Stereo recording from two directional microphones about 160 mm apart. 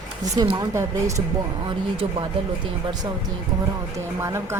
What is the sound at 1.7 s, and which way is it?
Speech, 30° right (ahead or behind).